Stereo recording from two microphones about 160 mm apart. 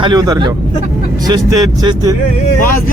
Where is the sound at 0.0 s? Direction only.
25° right (ahead or behind).